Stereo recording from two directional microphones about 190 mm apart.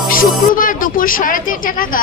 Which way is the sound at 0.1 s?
45° left (ahead or behind).